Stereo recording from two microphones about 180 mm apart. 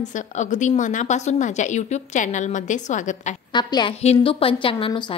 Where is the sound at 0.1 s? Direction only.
40° left (ahead or behind).